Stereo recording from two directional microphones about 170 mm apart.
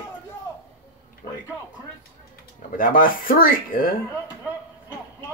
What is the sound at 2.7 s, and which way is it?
Speech, 55° left (ahead or behind).